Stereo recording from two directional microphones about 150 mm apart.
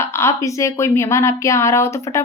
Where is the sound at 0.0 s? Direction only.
20° left (ahead or behind).